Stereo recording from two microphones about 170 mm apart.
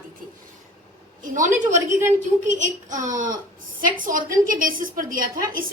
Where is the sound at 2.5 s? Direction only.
45° right (ahead or behind).